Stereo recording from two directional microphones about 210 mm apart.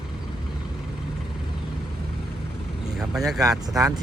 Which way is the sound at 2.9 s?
Centre (ahead or behind).